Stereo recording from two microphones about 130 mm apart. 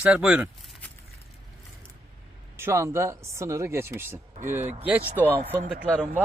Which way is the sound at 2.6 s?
20° right (ahead or behind).